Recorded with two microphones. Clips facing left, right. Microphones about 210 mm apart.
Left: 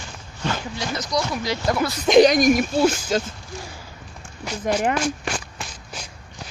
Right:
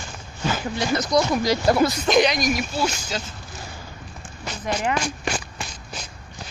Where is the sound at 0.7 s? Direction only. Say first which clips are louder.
Right 8 dB; 55° right (ahead or behind).